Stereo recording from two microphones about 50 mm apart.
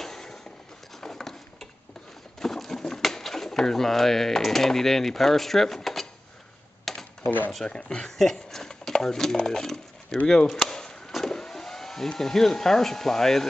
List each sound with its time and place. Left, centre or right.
0.0 s a sound: centre
2.4 s speech: centre
6.8 s typing: centre
7.2 s speech: left
7.6 s speech: centre
10.7 s vehicle: centre